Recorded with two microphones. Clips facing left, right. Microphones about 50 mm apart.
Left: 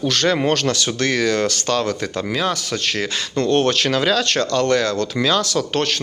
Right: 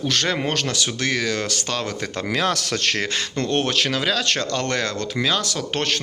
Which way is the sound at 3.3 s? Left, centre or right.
Right.